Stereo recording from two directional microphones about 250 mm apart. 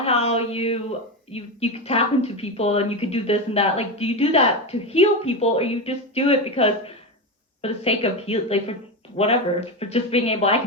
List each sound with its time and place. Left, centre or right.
0.0 s a woman's voice: left